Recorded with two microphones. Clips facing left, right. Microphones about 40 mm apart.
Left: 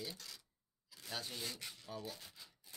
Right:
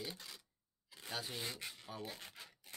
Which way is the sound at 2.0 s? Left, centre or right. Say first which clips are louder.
Right 2 dB; right.